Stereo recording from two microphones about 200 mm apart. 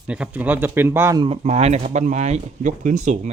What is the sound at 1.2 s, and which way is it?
Speech, 30° right (ahead or behind).